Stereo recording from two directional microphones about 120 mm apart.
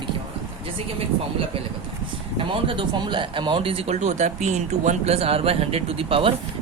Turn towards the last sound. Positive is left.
turn(degrees=-50)  # may be behind; listen again after turning